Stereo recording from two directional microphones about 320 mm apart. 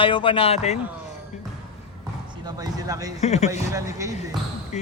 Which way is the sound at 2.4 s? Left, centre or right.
Centre.